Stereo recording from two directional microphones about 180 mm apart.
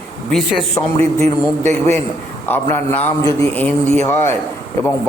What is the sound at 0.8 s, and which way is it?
Speech, 15° left (ahead or behind).